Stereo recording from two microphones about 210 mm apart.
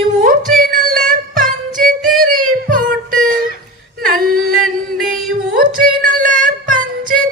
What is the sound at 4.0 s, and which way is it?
Yodeling, 40° right (ahead or behind).